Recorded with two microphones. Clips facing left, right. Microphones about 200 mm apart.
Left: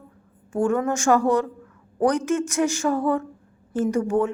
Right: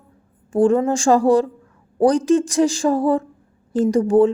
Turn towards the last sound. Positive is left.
turn(degrees=-30)  # may be behind; listen again after turning